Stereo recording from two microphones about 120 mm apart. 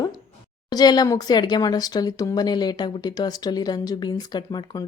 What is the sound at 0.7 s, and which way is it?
Speech, 35° left (ahead or behind).